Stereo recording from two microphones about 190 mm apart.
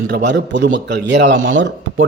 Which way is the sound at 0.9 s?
70° right (ahead or behind).